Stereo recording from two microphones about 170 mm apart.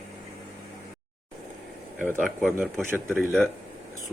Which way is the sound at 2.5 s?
10° right (ahead or behind).